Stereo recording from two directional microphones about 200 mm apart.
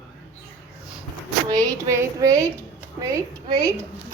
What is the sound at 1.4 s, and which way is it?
Speech, 15° right (ahead or behind).